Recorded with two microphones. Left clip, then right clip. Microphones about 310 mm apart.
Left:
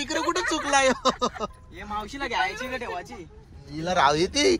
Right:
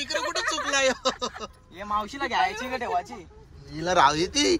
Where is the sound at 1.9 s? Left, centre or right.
Centre.